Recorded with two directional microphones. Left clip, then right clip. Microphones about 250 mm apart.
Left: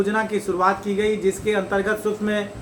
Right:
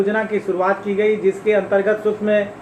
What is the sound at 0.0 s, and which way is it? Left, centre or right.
Speech, left.